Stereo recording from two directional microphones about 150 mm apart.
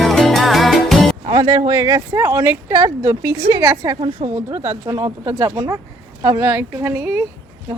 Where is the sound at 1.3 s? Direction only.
25° right (ahead or behind).